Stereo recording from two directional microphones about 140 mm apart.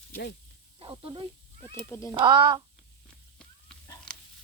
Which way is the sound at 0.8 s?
40° right (ahead or behind).